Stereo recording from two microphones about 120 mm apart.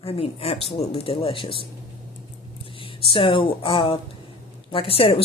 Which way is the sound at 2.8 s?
45° left (ahead or behind).